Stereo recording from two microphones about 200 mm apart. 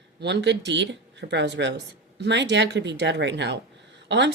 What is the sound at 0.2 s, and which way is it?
A woman's voice, 60° right (ahead or behind).